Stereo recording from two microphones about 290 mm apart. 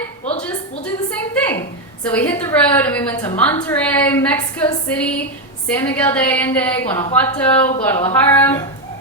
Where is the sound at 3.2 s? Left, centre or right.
Centre.